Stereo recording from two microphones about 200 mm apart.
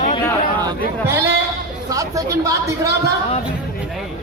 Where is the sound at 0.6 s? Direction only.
15° right (ahead or behind).